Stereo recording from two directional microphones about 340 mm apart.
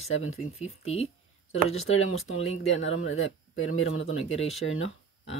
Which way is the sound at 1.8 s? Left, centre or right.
Left.